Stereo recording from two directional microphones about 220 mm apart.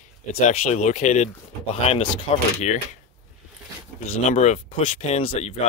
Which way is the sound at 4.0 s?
30° left (ahead or behind).